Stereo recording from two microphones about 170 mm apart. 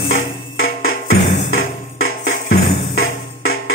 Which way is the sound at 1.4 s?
90° left.